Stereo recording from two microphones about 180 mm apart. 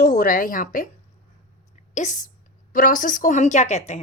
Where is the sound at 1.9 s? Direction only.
45° left (ahead or behind).